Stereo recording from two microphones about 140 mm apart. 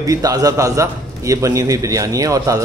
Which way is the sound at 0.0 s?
25° right (ahead or behind).